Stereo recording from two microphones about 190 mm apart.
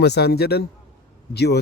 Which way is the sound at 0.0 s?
60° left (ahead or behind).